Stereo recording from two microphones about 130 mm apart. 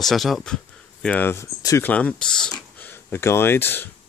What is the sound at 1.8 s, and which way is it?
Speech, 10° left (ahead or behind).